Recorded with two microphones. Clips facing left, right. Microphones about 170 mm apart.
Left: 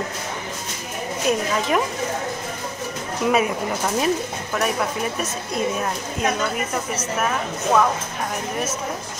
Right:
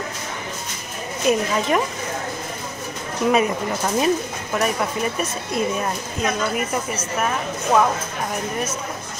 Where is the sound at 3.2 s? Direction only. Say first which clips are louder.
Right 1 dB; 5° left (ahead or behind).